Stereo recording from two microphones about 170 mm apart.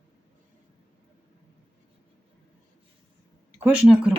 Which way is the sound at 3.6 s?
5° right (ahead or behind).